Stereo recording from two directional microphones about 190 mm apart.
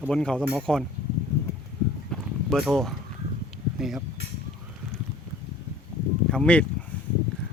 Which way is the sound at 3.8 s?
Centre (ahead or behind).